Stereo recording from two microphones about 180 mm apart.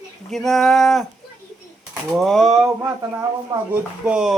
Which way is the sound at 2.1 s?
Centre (ahead or behind).